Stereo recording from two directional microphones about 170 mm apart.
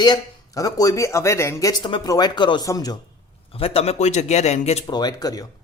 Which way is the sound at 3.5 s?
35° left (ahead or behind).